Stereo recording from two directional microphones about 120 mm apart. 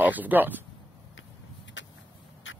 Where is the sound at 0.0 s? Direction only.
15° right (ahead or behind).